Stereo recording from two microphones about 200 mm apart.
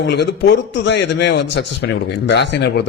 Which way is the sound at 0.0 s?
60° left (ahead or behind).